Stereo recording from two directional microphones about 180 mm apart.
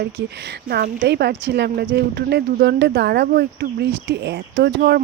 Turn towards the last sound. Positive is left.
turn(degrees=-65)  # may be behind; listen again after turning